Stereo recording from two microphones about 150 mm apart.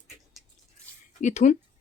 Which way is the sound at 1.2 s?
50° left (ahead or behind).